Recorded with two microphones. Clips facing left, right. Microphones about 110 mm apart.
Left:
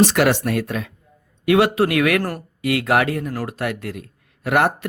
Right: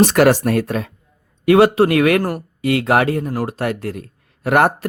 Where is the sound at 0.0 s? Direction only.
45° right (ahead or behind).